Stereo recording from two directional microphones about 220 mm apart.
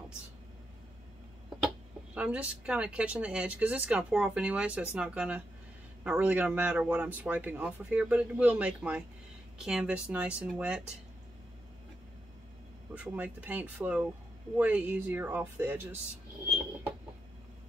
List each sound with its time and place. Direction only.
2.1 s speech: 5° right (ahead or behind)
12.9 s speech: 5° right (ahead or behind)